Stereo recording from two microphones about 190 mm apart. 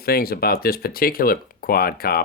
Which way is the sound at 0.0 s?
55° left (ahead or behind).